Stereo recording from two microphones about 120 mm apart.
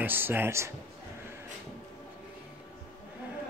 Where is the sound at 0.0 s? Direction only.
15° right (ahead or behind).